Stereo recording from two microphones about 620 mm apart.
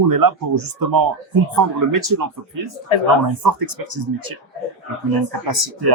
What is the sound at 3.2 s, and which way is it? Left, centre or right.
Speech, right.